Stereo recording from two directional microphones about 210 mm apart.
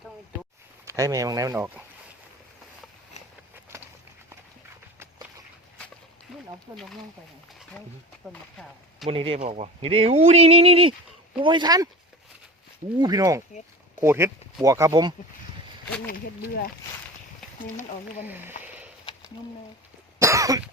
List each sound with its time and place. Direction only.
0.9 s speech: 15° right (ahead or behind)
6.7 s speech: 15° right (ahead or behind)
7.8 s speech: 5° left (ahead or behind)
9.0 s speech: 25° right (ahead or behind)
13.0 s speech: 20° right (ahead or behind)
16.0 s speech: 45° left (ahead or behind)
18.3 s speech: 10° right (ahead or behind)
18.6 s a sound: 10° right (ahead or behind)
20.1 s cough: 15° right (ahead or behind)